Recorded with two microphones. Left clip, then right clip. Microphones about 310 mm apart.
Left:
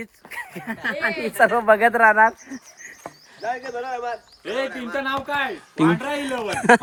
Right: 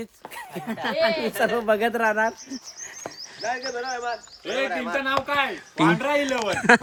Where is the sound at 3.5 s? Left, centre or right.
Left.